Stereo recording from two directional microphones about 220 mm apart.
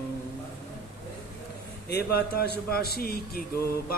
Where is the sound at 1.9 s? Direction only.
45° left (ahead or behind).